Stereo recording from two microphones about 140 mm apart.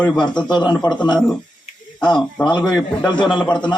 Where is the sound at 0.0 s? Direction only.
10° left (ahead or behind).